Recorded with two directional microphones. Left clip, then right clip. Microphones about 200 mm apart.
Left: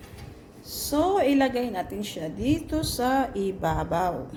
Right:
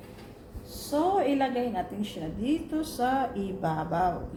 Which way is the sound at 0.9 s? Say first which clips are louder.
Left 3 dB; 55° left (ahead or behind).